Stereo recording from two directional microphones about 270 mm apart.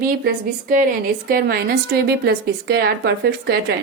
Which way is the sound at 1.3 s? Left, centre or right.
Right.